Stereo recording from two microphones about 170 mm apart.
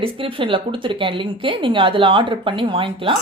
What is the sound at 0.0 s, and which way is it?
A woman's voice, 30° right (ahead or behind).